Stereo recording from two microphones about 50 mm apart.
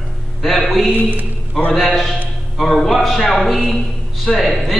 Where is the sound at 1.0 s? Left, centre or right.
Right.